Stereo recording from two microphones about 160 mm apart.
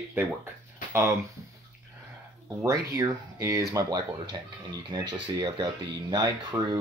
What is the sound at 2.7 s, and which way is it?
Speech, 20° right (ahead or behind).